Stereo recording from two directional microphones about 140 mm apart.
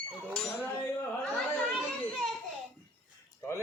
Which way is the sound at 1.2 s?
5° left (ahead or behind).